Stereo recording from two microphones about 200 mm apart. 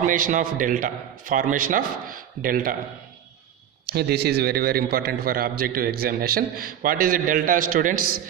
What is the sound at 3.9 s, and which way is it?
A man's voice, 55° right (ahead or behind).